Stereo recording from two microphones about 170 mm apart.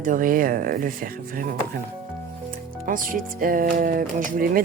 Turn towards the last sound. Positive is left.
turn(degrees=-55)  # may be behind; listen again after turning